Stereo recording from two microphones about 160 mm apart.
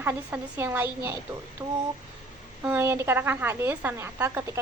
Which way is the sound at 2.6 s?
10° right (ahead or behind).